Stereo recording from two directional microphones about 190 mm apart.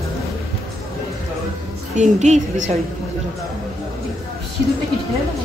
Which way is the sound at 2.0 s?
40° right (ahead or behind).